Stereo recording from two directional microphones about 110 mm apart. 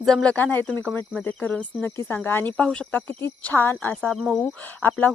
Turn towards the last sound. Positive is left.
turn(degrees=15)  # may be behind; listen again after turning